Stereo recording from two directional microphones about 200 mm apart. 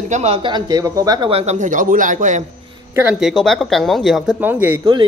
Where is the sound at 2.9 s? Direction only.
5° right (ahead or behind).